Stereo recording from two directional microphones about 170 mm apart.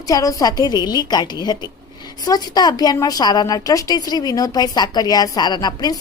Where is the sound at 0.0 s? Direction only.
20° left (ahead or behind).